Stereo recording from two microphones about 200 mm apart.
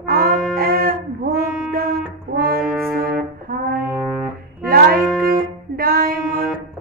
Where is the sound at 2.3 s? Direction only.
50° right (ahead or behind).